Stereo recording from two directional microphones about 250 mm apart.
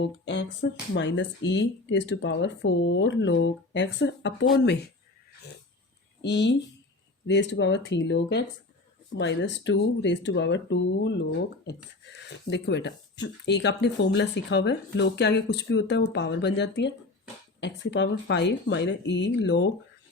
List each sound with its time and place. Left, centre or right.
0.0 s speech: left
6.2 s speech: left